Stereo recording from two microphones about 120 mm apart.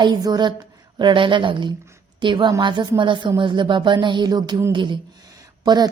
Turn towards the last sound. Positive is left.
turn(degrees=-35)  # may be behind; listen again after turning